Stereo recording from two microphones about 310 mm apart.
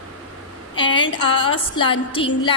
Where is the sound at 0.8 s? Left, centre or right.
Centre.